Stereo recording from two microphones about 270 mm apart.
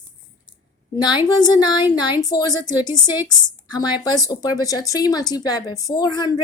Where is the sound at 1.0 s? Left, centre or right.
Centre.